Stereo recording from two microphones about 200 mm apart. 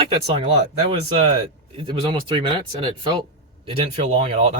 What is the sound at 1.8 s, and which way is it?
Speech, 25° right (ahead or behind).